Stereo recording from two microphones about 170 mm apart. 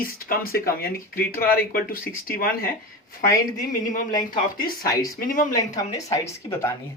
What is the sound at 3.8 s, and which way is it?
Speech, 50° left (ahead or behind).